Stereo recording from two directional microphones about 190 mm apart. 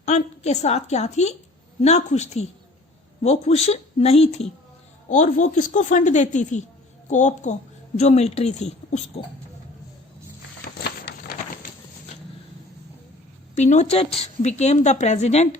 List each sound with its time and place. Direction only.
0.0 s a woman's voice: 35° left (ahead or behind)
13.6 s a woman's voice: 35° left (ahead or behind)